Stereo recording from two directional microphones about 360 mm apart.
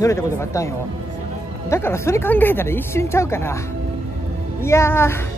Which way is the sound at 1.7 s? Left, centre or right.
Centre.